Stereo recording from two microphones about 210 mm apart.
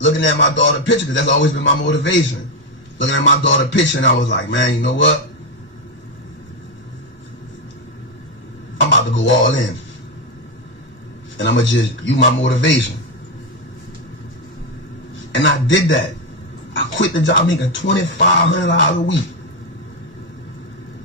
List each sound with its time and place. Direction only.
0.0 s speech: 60° left (ahead or behind)
8.9 s speech: 65° left (ahead or behind)
11.3 s speech: 60° left (ahead or behind)
15.3 s speech: 60° left (ahead or behind)